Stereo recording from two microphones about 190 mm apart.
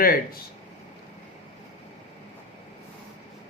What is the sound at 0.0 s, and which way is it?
Speech, 50° left (ahead or behind).